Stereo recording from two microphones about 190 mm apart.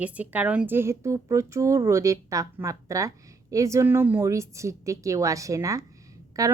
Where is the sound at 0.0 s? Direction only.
10° right (ahead or behind).